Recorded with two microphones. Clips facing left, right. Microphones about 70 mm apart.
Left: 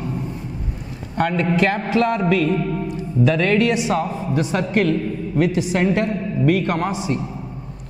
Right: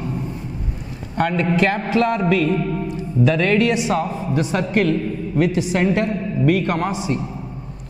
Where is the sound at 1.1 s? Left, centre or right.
Centre.